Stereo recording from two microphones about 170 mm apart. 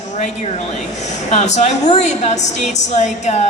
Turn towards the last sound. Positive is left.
turn(degrees=40)  # may be behind; listen again after turning